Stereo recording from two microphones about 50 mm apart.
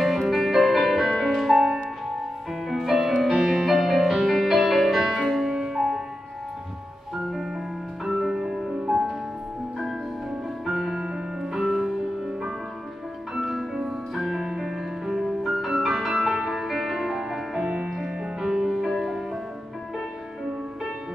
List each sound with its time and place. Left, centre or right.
0.0 s music: centre
8.0 s music: centre
10.6 s music: centre
17.6 s music: centre
17.8 s music: centre